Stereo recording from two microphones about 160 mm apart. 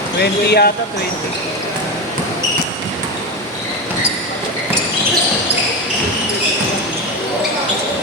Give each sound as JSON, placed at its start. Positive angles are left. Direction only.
{"t": 0.2, "sound": "speech", "side_deg": 85}